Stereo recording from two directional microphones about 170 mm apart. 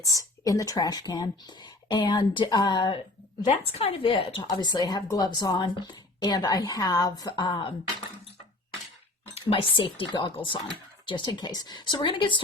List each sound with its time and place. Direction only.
0.1 s a woman's voice: 20° left (ahead or behind)
9.3 s a woman's voice: 30° left (ahead or behind)